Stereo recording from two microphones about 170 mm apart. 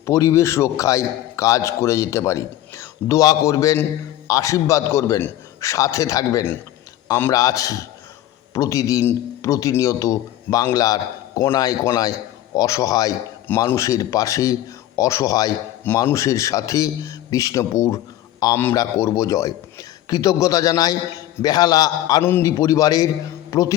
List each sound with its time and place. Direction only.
0.0 s a man's voice: 15° left (ahead or behind)